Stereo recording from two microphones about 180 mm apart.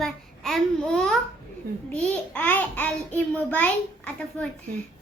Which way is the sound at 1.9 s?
5° left (ahead or behind).